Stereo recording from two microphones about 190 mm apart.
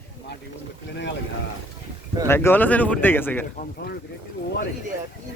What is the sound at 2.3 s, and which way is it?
Speech, 10° left (ahead or behind).